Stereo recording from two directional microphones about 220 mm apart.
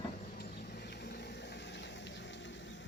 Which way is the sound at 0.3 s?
45° left (ahead or behind).